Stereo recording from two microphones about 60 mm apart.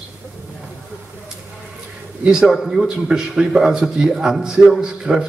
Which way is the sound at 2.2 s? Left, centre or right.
Centre.